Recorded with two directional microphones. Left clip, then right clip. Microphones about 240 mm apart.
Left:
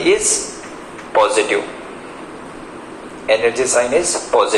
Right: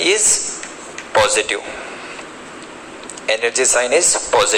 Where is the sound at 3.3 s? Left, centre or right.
Right.